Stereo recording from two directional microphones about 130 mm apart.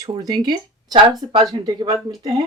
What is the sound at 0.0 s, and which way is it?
Speech, 35° right (ahead or behind).